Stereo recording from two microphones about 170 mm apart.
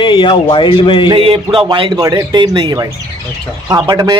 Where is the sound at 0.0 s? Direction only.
30° left (ahead or behind).